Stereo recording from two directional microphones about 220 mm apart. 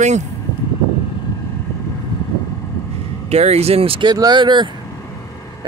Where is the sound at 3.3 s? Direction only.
30° right (ahead or behind).